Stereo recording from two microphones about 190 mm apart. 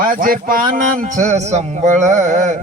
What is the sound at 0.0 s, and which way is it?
Speech, 45° right (ahead or behind).